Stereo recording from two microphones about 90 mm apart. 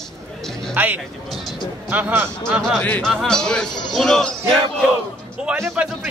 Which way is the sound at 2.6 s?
10° left (ahead or behind).